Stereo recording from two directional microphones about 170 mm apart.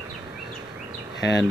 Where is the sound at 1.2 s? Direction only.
85° left.